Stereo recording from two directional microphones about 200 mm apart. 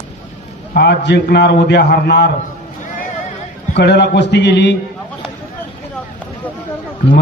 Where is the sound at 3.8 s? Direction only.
60° left (ahead or behind).